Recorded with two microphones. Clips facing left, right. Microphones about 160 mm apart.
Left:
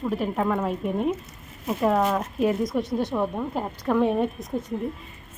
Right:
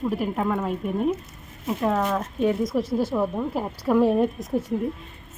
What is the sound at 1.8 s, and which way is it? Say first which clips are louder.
A woman's voice: left 2 dB; 5° left (ahead or behind).